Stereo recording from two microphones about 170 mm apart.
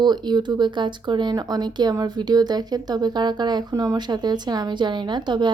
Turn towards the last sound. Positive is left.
turn(degrees=-25)  # may be behind; listen again after turning